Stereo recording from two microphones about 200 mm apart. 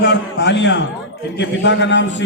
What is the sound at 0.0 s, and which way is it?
A man's voice, 60° left (ahead or behind).